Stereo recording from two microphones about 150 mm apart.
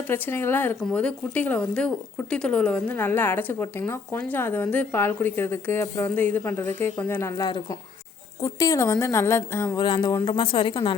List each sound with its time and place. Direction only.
0.1 s a woman's voice: 15° left (ahead or behind)
7.4 s a woman's voice: 30° left (ahead or behind)
9.7 s a woman's voice: 30° left (ahead or behind)